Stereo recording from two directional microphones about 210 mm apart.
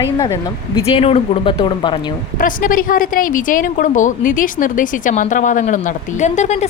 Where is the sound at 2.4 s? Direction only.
40° left (ahead or behind).